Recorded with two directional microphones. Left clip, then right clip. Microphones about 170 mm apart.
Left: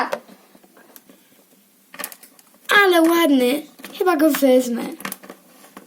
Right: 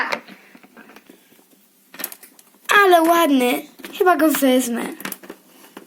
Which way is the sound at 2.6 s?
15° right (ahead or behind).